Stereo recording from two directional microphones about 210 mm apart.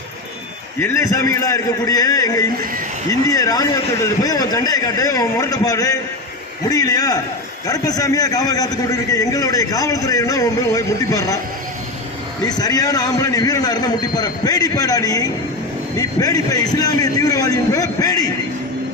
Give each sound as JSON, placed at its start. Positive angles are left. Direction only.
{"t": 0.8, "sound": "a man's voice", "side_deg": 15}
{"t": 12.5, "sound": "a man's voice", "side_deg": 20}